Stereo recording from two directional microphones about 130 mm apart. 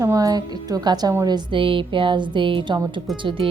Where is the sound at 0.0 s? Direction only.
25° right (ahead or behind).